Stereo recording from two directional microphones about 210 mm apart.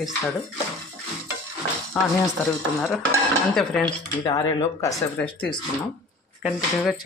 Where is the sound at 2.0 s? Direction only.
5° left (ahead or behind).